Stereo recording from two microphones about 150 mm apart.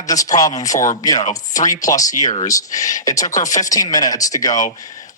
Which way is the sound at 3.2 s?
55° left (ahead or behind).